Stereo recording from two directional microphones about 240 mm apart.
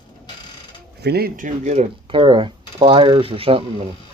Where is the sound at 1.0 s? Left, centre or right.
Right.